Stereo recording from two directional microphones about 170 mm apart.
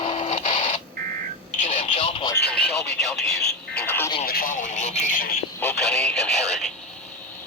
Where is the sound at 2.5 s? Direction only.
Centre (ahead or behind).